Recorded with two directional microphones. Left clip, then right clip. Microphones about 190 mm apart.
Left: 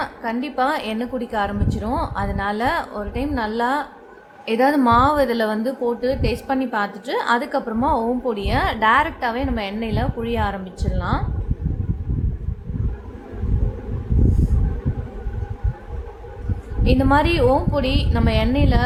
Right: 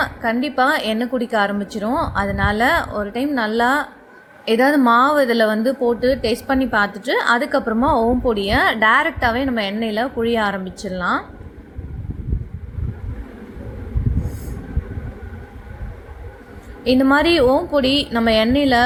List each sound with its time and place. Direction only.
0.0 s a woman's voice: 15° right (ahead or behind)
16.8 s a woman's voice: 15° right (ahead or behind)